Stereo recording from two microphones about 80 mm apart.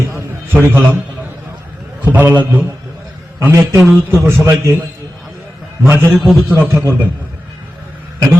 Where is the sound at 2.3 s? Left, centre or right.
Right.